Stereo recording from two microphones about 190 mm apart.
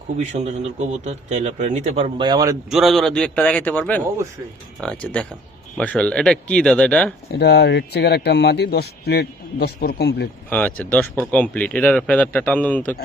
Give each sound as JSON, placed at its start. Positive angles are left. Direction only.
{"t": 0.2, "sound": "a man's voice", "side_deg": -35}
{"t": 2.1, "sound": "speech", "side_deg": -20}
{"t": 2.6, "sound": "speech", "side_deg": 0}
{"t": 7.3, "sound": "a man's voice", "side_deg": 60}
{"t": 10.5, "sound": "speech", "side_deg": 5}